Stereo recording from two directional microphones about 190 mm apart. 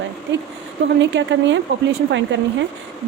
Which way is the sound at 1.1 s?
70° right (ahead or behind).